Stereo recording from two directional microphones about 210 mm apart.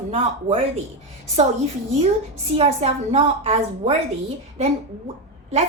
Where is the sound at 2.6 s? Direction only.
30° right (ahead or behind).